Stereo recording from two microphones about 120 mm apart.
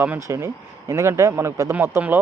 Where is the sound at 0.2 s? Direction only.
25° right (ahead or behind).